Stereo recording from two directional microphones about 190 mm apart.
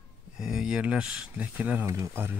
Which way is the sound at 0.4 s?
Centre (ahead or behind).